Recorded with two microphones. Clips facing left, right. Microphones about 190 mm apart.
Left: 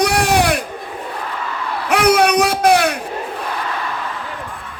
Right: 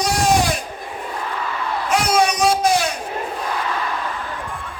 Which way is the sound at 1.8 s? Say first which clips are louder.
Left 5 dB; 65° left (ahead or behind).